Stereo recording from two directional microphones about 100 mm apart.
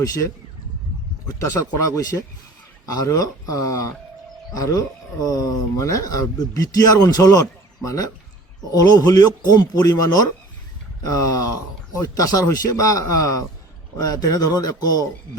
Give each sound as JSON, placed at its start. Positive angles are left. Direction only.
{"t": 0.0, "sound": "speech", "side_deg": 40}
{"t": 2.0, "sound": "speech", "side_deg": 40}